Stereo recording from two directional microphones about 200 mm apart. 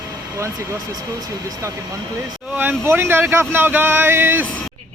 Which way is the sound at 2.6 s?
10° right (ahead or behind).